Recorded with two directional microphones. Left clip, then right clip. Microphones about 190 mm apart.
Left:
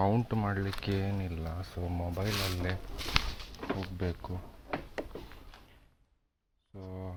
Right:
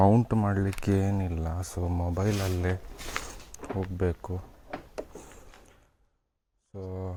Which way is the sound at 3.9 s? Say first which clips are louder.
Right 7 dB; 55° right (ahead or behind).